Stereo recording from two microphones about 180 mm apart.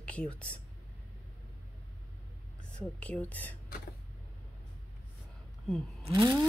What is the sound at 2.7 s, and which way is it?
Speech, 5° left (ahead or behind).